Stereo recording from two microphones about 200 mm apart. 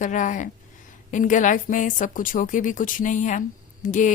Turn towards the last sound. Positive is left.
turn(degrees=40)  # may be behind; listen again after turning